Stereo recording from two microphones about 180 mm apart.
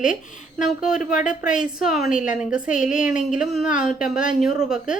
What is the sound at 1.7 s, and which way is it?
A woman's voice, centre (ahead or behind).